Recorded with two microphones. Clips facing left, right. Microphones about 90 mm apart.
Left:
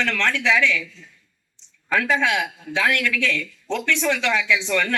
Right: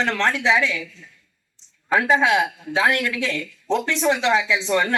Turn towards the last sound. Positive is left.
turn(degrees=-30)  # may be behind; listen again after turning